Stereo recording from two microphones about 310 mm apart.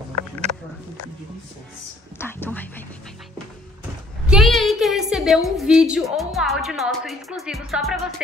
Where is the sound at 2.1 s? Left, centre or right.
Centre.